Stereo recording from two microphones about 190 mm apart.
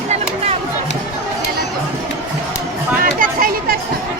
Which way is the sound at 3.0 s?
50° right (ahead or behind).